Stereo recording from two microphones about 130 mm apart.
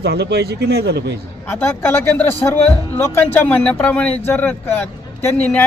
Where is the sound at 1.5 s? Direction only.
15° left (ahead or behind).